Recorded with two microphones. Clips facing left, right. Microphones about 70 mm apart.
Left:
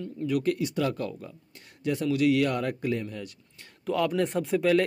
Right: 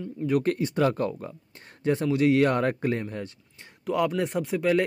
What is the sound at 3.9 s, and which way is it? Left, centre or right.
Speech, centre.